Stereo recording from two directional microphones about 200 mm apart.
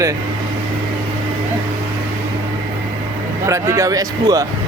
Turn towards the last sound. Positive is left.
turn(degrees=-15)  # may be behind; listen again after turning